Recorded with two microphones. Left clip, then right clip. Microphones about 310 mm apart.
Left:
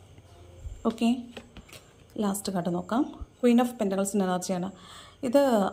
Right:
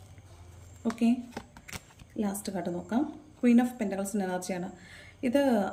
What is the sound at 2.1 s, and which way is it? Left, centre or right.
A woman's voice, centre.